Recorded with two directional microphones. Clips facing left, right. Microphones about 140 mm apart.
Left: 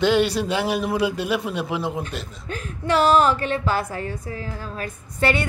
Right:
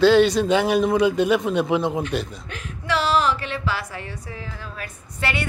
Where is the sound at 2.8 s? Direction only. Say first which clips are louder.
Left 4 dB; 50° left (ahead or behind).